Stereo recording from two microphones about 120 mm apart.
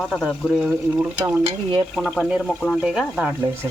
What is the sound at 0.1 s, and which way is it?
Speech, centre (ahead or behind).